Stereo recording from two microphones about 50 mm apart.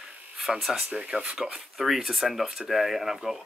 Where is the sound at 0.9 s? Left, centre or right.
Centre.